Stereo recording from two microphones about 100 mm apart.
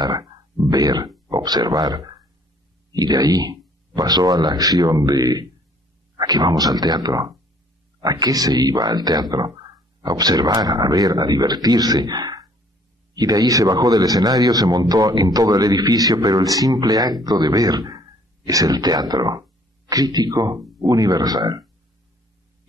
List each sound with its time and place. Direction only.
0.0 s speech: 40° right (ahead or behind)